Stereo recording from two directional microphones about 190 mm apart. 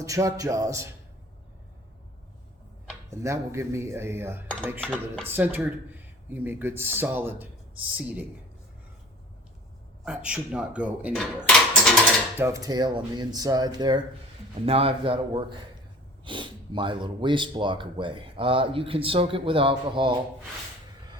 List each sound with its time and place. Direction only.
0.0 s speech: 15° right (ahead or behind)
3.1 s speech: 15° right (ahead or behind)
4.8 s speech: 5° left (ahead or behind)
5.3 s speech: 10° right (ahead or behind)
10.0 s speech: 5° right (ahead or behind)
11.1 s speech: 5° left (ahead or behind)
12.4 s speech: 15° right (ahead or behind)